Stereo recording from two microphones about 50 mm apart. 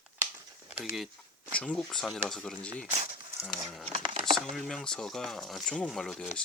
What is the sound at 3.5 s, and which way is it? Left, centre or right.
Speech, centre.